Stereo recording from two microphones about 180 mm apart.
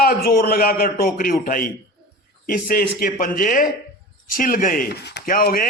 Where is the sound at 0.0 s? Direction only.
55° left (ahead or behind).